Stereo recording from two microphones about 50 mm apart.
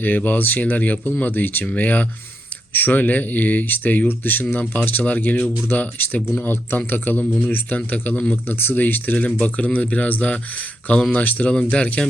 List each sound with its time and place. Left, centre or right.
0.0 s speech: left
8.4 s speech: left
11.5 s speech: centre